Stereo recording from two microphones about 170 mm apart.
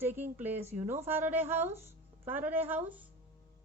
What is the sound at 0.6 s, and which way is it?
Speech, 40° right (ahead or behind).